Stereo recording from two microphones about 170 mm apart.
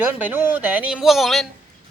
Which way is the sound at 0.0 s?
10° right (ahead or behind).